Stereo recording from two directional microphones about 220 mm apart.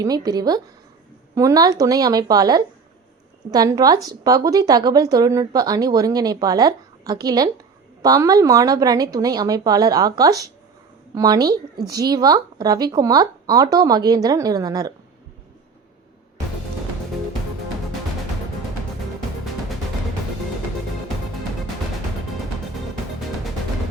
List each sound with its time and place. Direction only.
0.0 s a woman's voice: 15° right (ahead or behind)